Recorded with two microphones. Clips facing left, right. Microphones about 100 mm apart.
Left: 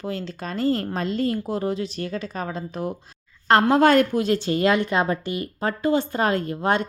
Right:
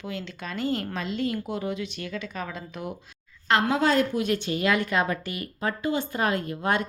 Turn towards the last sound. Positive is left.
turn(degrees=30)  # may be behind; listen again after turning